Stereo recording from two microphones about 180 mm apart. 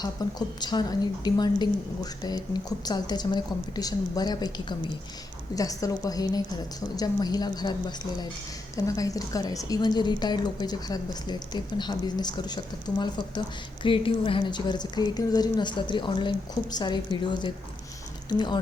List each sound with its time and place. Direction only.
0.0 s a woman's voice: 20° left (ahead or behind)